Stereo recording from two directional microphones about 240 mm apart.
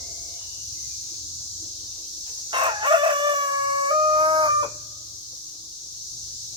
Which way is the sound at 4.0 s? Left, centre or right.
Right.